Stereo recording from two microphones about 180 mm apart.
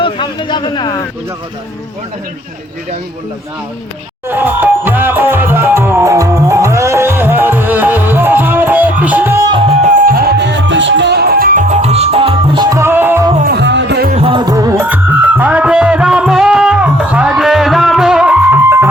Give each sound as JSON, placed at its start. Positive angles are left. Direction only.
{"t": 0.0, "sound": "speech", "side_deg": 25}
{"t": 4.3, "sound": "music", "side_deg": -10}
{"t": 10.1, "sound": "music", "side_deg": -55}
{"t": 12.7, "sound": "music", "side_deg": -15}
{"t": 13.4, "sound": "music", "side_deg": -65}
{"t": 14.1, "sound": "music", "side_deg": -30}